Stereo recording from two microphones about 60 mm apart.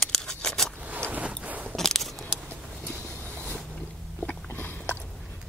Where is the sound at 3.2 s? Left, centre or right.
Right.